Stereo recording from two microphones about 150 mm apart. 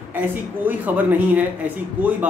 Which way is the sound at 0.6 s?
10° right (ahead or behind).